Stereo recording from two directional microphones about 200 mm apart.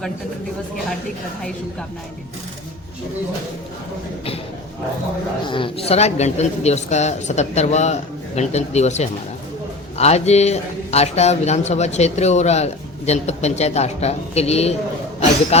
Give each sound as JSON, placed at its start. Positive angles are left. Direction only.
{"t": 5.5, "sound": "a man's voice", "side_deg": 25}